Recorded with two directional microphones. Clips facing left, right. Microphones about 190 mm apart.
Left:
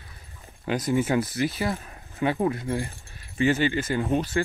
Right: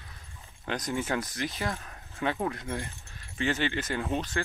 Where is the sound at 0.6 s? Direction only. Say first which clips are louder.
Left 7 dB; 5° left (ahead or behind).